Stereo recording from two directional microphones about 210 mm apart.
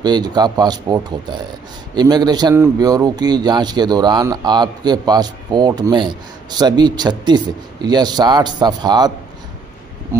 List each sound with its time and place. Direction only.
0.0 s a man's voice: 20° right (ahead or behind)